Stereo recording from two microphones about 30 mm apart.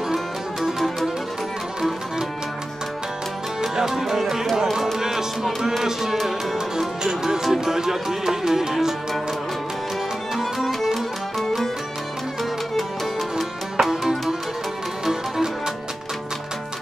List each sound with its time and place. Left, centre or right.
1.8 s music: centre
3.7 s music: centre
10.3 s music: centre
13.8 s music: right